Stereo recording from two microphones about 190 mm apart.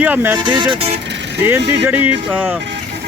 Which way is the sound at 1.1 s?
65° right (ahead or behind).